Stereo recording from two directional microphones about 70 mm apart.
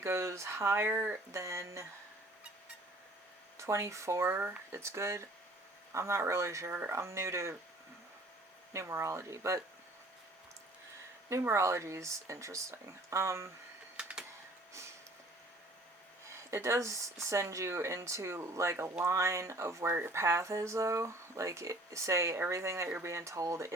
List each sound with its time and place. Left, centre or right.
0.0 s speech: right
1.3 s speech: right
3.6 s speech: right
4.4 s speech: right
4.7 s speech: right
8.7 s speech: right
11.3 s speech: right
14.0 s typewriter: centre
14.7 s a sound: right
16.3 s speech: right
20.2 s speech: right